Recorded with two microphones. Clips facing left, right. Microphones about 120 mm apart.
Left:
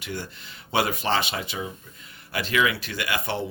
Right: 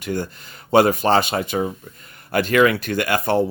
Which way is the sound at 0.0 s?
45° right (ahead or behind).